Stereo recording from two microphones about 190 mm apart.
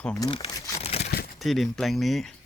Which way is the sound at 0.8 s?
35° left (ahead or behind).